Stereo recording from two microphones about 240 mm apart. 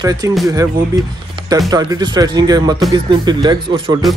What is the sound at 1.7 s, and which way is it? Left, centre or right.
Speech, centre.